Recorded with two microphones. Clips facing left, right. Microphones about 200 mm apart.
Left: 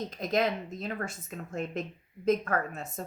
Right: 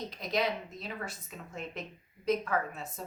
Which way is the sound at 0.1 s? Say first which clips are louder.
Left 3 dB; 50° left (ahead or behind).